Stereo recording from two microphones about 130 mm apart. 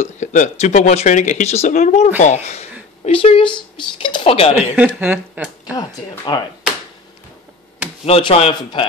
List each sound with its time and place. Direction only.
0.0 s speech: 70° left (ahead or behind)
3.1 s speech: 45° left (ahead or behind)
4.7 s a woman's voice: 10° right (ahead or behind)
5.8 s speech: 35° left (ahead or behind)
8.0 s speech: 45° left (ahead or behind)